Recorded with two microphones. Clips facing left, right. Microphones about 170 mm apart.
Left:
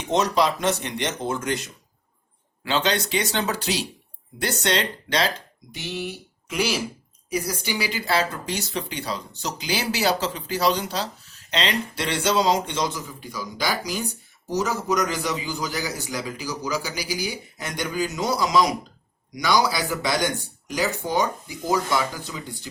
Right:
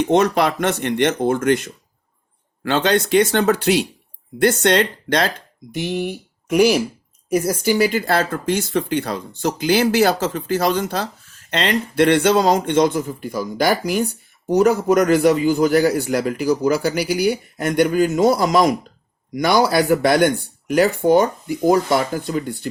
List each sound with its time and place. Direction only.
0.0 s speech: 60° right (ahead or behind)